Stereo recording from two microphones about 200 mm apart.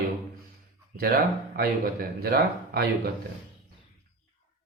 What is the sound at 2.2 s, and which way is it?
Speech, 50° right (ahead or behind).